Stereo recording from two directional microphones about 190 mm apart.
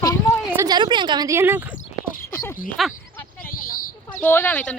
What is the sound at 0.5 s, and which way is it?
A woman's voice, 20° right (ahead or behind).